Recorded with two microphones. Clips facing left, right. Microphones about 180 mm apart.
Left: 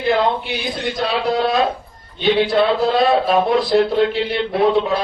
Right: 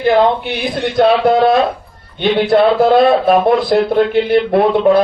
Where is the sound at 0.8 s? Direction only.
60° right (ahead or behind).